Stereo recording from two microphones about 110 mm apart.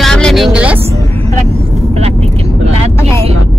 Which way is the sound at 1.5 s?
70° right (ahead or behind).